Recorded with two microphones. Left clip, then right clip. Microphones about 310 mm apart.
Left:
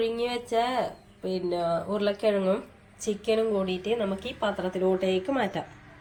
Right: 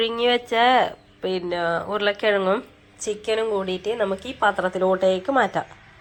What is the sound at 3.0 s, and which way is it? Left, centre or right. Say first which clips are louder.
A woman's voice: right 3 dB; centre.